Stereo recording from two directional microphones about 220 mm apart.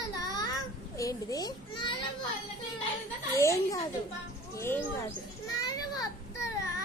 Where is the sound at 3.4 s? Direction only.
15° left (ahead or behind).